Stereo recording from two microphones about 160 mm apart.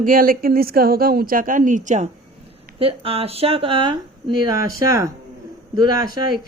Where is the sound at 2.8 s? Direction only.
35° right (ahead or behind).